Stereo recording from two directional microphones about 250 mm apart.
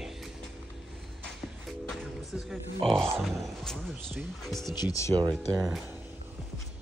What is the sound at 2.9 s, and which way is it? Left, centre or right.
Speech, centre.